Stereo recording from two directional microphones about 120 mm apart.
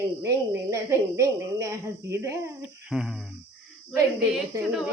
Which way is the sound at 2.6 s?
5° right (ahead or behind).